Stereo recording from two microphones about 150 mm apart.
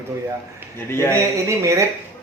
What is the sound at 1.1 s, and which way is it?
Speech, 20° right (ahead or behind).